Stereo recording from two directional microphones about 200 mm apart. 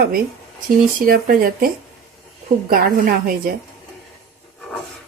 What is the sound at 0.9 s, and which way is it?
Speech, 45° right (ahead or behind).